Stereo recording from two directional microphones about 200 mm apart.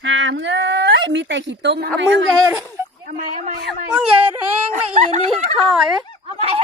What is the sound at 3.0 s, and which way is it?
Speech, 40° right (ahead or behind).